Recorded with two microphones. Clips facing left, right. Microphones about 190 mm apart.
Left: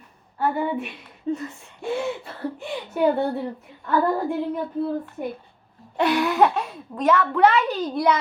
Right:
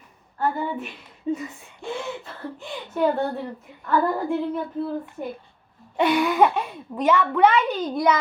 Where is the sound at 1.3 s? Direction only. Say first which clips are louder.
Even; 5° right (ahead or behind).